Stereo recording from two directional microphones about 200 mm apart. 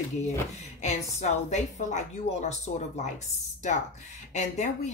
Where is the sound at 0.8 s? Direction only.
35° left (ahead or behind).